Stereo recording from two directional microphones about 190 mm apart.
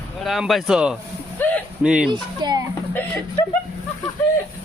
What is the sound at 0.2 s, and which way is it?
Speech, centre (ahead or behind).